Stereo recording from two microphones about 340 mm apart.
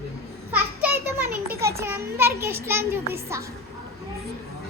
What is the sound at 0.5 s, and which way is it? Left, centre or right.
A child's voice, centre.